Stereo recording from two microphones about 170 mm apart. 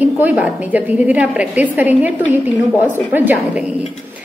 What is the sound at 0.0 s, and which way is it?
A woman's voice, 10° right (ahead or behind).